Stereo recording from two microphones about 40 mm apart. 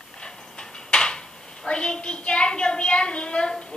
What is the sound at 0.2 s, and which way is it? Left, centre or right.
Speech, left.